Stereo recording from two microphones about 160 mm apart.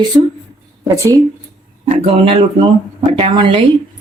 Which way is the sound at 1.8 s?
40° right (ahead or behind).